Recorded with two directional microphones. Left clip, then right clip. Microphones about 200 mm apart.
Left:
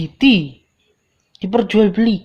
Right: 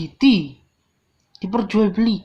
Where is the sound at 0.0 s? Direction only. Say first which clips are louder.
Left 3 dB; 45° left (ahead or behind).